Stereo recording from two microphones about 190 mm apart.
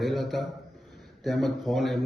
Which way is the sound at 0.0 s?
Centre (ahead or behind).